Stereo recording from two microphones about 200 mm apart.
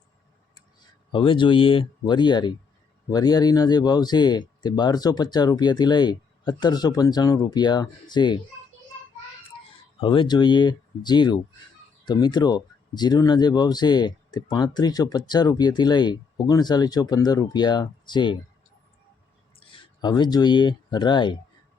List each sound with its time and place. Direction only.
1.1 s speech: 25° left (ahead or behind)
9.6 s speech: 25° left (ahead or behind)
19.5 s speech: 25° left (ahead or behind)